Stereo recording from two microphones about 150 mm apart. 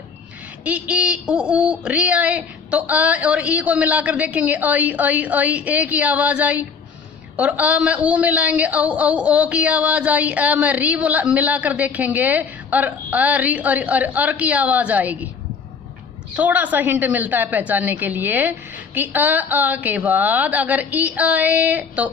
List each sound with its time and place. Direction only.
0.6 s a woman's voice: 10° right (ahead or behind)
16.3 s a woman's voice: 10° right (ahead or behind)